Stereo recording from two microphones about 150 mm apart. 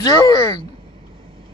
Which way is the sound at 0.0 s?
25° left (ahead or behind).